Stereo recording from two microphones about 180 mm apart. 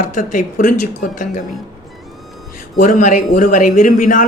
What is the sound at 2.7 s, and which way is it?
Speech, 45° left (ahead or behind).